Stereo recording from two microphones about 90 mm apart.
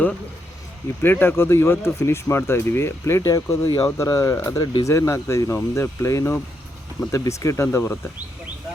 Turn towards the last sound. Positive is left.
turn(degrees=30)  # may be behind; listen again after turning